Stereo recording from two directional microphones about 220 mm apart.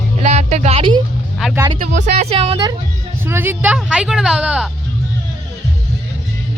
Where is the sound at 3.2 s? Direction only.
10° right (ahead or behind).